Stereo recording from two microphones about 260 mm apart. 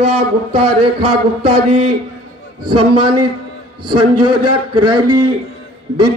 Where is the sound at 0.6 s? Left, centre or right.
Right.